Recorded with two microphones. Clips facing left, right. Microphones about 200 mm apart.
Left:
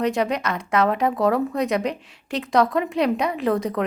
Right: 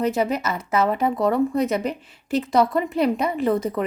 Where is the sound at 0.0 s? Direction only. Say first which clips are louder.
Even; 5° right (ahead or behind).